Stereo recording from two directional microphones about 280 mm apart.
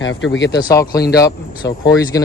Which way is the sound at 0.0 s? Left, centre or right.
Left.